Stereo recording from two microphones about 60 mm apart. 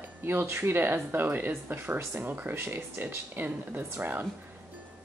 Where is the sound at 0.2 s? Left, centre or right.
Right.